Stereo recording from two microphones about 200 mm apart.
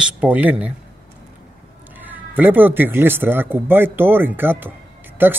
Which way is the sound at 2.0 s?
10° right (ahead or behind).